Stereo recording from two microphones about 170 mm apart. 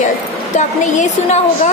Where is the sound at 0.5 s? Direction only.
45° left (ahead or behind).